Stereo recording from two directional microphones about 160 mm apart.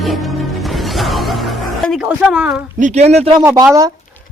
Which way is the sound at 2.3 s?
10° right (ahead or behind).